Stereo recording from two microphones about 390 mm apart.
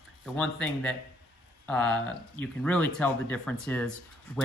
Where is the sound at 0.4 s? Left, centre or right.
Centre.